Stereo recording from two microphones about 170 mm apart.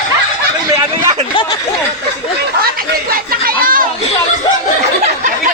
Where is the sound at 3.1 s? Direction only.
55° right (ahead or behind).